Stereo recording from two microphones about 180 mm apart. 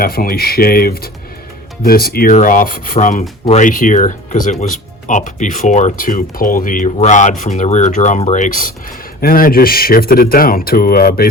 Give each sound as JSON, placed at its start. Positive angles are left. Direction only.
{"t": 0.0, "sound": "speech", "side_deg": 55}